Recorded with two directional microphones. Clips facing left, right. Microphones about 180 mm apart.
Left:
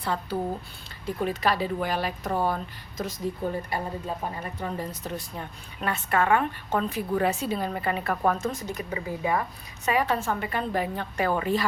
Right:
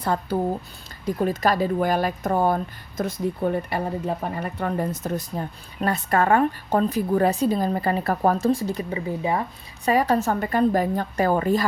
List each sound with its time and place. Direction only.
0.0 s speech: 45° right (ahead or behind)
3.7 s speech: 65° right (ahead or behind); by 9.4 s 25° right (ahead or behind)
9.8 s speech: 40° right (ahead or behind)